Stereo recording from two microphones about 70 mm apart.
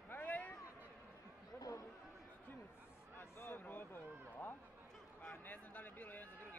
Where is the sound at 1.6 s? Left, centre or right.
Left.